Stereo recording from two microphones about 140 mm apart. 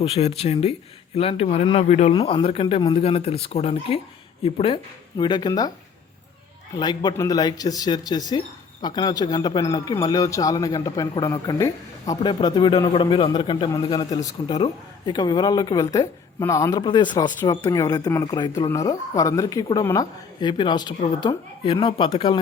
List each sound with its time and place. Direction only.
0.0 s speech: 50° left (ahead or behind)
2.1 s speech: 40° left (ahead or behind)
6.7 s a man's voice: 30° left (ahead or behind)
11.3 s a man's voice: 20° left (ahead or behind)
16.8 s a man's voice: 35° left (ahead or behind)
20.4 s speech: 35° left (ahead or behind)